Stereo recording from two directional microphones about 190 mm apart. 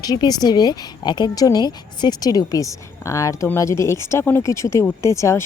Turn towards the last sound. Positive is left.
turn(degrees=15)  # may be behind; listen again after turning